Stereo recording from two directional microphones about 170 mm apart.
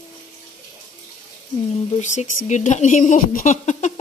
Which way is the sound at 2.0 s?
45° left (ahead or behind).